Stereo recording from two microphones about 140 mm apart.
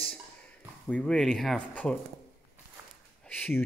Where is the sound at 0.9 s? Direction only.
5° left (ahead or behind).